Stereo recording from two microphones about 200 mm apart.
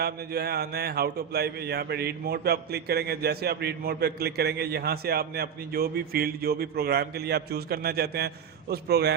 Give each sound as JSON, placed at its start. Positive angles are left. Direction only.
{"t": 0.0, "sound": "a man's voice", "side_deg": -50}